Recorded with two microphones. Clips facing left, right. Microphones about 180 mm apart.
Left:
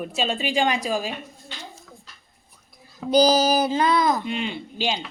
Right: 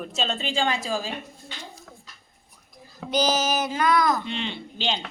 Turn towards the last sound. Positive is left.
turn(degrees=10)  # may be behind; listen again after turning